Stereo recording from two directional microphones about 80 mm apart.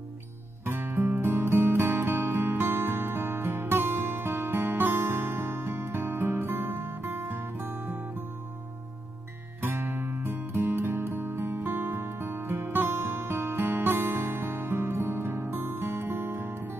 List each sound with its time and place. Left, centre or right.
0.7 s music: right
9.6 s music: right